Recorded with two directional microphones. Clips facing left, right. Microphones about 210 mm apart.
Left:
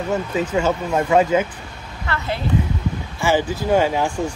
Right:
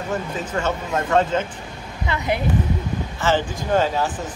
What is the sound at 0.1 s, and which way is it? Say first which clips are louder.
Speech: left 5 dB; 10° left (ahead or behind).